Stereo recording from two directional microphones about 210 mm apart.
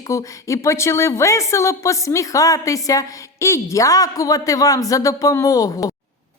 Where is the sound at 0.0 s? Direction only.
15° left (ahead or behind).